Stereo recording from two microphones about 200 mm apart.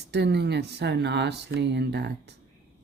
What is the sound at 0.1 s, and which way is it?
Speech, 60° right (ahead or behind).